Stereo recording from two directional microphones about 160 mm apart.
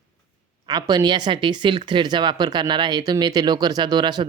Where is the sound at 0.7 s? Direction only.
25° right (ahead or behind).